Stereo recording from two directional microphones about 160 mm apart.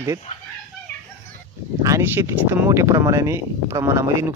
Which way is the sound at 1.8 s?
15° right (ahead or behind).